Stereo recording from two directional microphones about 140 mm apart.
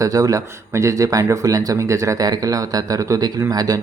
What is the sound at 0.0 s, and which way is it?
Speech, 25° right (ahead or behind).